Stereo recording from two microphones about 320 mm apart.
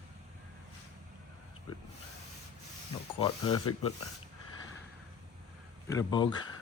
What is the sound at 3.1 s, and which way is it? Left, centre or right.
Speech, centre.